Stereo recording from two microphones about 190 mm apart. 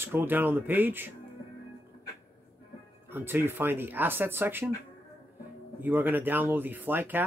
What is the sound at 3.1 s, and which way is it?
Speech, 10° right (ahead or behind).